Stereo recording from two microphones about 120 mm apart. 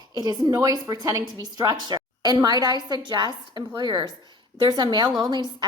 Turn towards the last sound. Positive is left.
turn(degrees=-35)  # may be behind; listen again after turning